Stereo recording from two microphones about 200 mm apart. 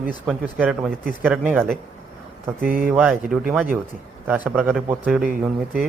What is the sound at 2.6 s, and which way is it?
Speech, 45° right (ahead or behind).